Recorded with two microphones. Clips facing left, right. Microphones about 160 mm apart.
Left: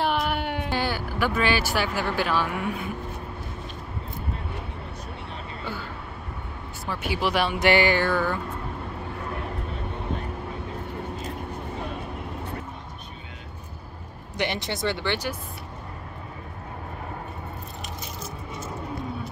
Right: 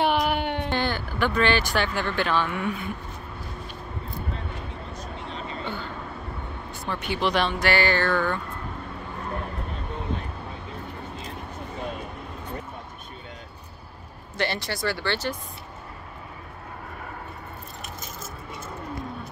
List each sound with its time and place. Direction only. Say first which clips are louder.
0.0 s speech: right 2 dB; centre (ahead or behind)
6.9 s speech: right 1 dB; 5° left (ahead or behind)
7.5 s speech: left 3 dB; 20° left (ahead or behind)
14.3 s speech: even; 15° left (ahead or behind)
18.0 s a sound: left 2 dB; 50° right (ahead or behind)